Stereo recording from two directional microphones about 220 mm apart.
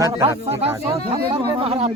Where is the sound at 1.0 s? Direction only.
25° right (ahead or behind).